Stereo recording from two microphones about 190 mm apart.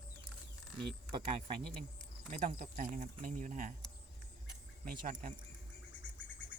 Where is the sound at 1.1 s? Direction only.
25° right (ahead or behind).